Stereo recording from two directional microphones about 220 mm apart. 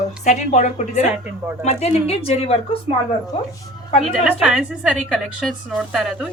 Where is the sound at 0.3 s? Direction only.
30° left (ahead or behind).